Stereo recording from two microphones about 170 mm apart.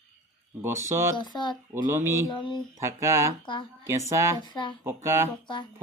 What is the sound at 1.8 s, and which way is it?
Speech, 15° right (ahead or behind).